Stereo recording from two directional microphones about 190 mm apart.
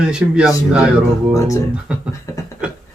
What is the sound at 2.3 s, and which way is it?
Speech, 15° left (ahead or behind).